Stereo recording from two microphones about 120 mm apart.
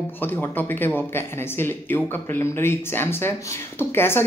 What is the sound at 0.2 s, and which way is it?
A woman's voice, 15° left (ahead or behind).